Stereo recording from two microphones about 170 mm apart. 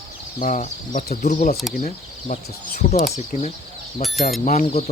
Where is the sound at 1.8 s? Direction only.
45° left (ahead or behind).